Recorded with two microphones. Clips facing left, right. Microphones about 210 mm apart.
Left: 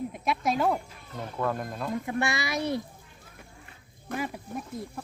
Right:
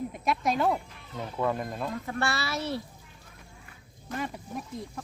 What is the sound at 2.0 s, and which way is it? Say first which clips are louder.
Speech: left 2 dB; 15° left (ahead or behind).